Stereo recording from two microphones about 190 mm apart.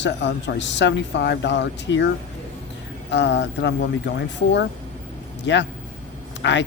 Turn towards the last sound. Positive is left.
turn(degrees=70)  # may be behind; listen again after turning